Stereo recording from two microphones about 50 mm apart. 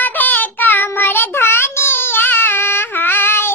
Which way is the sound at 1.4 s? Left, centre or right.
Left.